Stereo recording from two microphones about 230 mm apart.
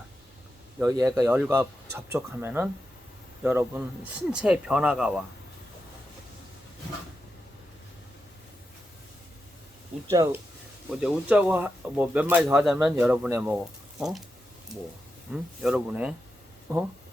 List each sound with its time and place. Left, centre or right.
0.8 s speech: centre
10.1 s speech: centre
15.3 s speech: centre